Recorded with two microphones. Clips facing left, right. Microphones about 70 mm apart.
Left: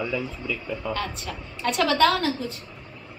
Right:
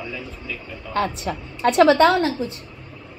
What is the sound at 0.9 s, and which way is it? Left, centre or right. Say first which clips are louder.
A woman's voice: right 9 dB; right.